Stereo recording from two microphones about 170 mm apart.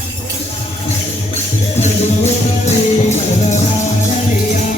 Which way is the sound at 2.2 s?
40° left (ahead or behind).